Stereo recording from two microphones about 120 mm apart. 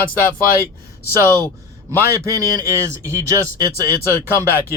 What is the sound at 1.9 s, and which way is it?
Speech, 25° right (ahead or behind).